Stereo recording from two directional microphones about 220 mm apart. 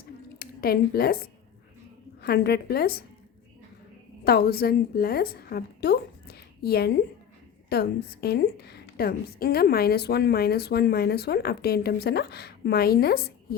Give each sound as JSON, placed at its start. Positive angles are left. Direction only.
{"t": 0.3, "sound": "a woman's voice", "side_deg": 45}
{"t": 4.2, "sound": "a woman's voice", "side_deg": 45}